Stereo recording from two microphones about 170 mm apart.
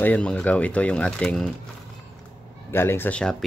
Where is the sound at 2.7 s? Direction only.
15° left (ahead or behind).